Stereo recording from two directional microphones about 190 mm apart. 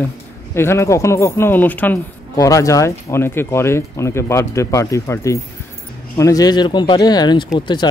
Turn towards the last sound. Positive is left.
turn(degrees=25)  # may be behind; listen again after turning